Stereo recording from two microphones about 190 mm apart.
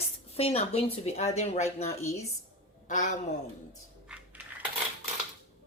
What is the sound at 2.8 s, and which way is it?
Speech, 40° left (ahead or behind).